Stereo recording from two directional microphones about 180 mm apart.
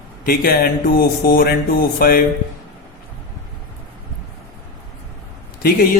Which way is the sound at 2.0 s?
55° left (ahead or behind).